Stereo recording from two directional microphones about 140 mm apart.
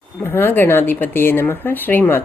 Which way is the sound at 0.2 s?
15° left (ahead or behind).